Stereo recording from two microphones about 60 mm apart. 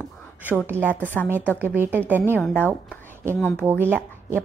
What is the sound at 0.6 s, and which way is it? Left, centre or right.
A woman's voice, right.